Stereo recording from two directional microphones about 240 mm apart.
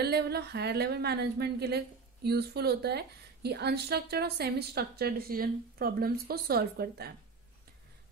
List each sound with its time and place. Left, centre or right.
0.0 s a woman's voice: right